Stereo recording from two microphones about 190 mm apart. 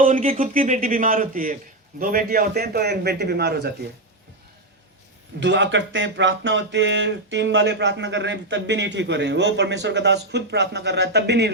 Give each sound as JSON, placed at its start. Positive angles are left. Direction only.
{"t": 0.0, "sound": "a man's voice", "side_deg": -40}
{"t": 5.4, "sound": "speech", "side_deg": -70}